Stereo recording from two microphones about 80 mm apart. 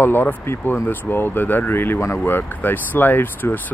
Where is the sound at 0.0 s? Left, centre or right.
Left.